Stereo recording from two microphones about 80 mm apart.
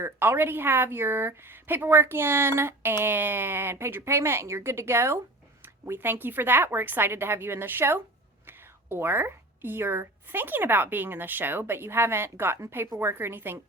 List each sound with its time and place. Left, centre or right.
0.0 s a woman's voice: right